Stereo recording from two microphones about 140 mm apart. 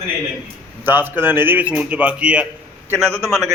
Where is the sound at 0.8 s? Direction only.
15° right (ahead or behind).